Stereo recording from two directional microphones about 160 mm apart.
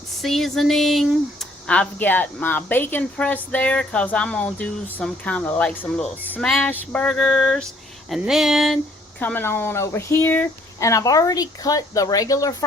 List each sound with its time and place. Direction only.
0.2 s speech: centre (ahead or behind); by 12.6 s 20° left (ahead or behind)